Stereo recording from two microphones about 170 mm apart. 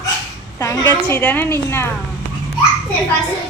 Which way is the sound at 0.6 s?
20° left (ahead or behind).